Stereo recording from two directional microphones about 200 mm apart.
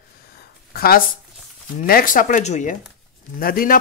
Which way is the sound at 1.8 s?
45° left (ahead or behind).